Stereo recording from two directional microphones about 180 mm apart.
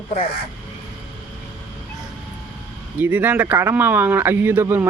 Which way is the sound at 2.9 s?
10° right (ahead or behind).